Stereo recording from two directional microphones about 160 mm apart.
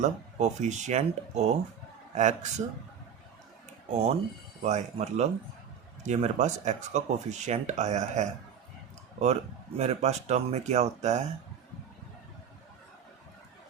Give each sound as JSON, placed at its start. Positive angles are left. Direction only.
{"t": 0.0, "sound": "speech", "side_deg": -45}
{"t": 4.6, "sound": "speech", "side_deg": -45}